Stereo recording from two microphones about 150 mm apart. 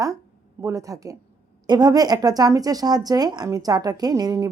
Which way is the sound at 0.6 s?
20° right (ahead or behind).